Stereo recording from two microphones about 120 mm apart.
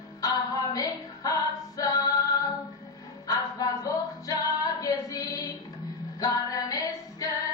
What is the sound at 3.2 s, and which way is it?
Female singing, 30° left (ahead or behind).